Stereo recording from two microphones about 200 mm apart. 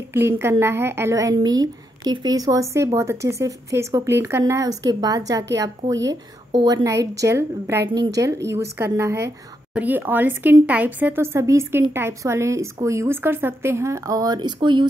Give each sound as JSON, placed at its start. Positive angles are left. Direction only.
{"t": 0.1, "sound": "a woman's voice", "side_deg": -10}